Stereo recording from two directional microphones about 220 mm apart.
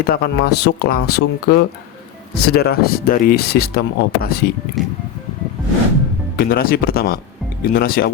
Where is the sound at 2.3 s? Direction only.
45° left (ahead or behind).